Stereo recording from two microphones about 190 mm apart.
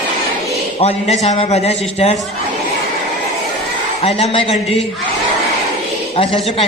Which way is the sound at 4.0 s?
35° left (ahead or behind).